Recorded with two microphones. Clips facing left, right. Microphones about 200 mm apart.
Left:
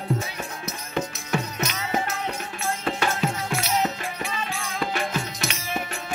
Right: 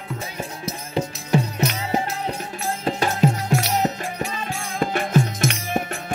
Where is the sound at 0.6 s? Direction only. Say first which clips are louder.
Right 3 dB; 30° right (ahead or behind).